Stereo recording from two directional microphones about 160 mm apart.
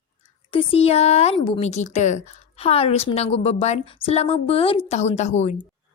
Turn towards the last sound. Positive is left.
turn(degrees=45)  # may be behind; listen again after turning